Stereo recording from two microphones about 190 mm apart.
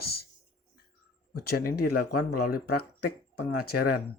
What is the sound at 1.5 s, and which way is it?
Speech, 55° left (ahead or behind).